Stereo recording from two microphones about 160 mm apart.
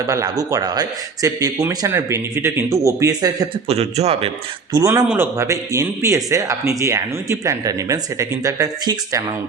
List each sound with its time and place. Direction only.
0.1 s speech: 20° right (ahead or behind)
3.7 s speech: 40° right (ahead or behind)
4.7 s speech: 20° right (ahead or behind)